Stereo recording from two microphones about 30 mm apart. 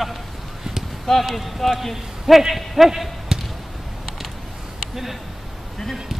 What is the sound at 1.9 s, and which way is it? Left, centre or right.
A man's voice, centre.